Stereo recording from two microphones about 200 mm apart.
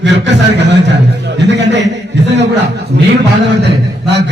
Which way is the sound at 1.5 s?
60° right (ahead or behind).